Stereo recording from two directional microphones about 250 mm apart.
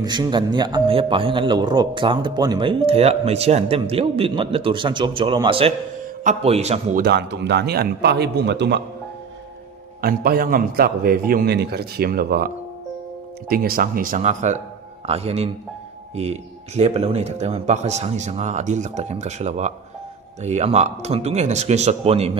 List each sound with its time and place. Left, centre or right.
0.0 s speech: centre
7.0 s a man's voice: right
10.0 s a man's voice: right